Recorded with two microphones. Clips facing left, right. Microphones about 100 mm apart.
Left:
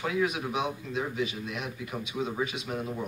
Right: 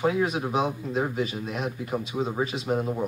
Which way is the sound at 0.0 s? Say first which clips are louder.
Right 4 dB; 35° right (ahead or behind).